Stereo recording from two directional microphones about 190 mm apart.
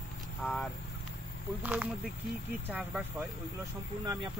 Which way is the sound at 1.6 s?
5° right (ahead or behind).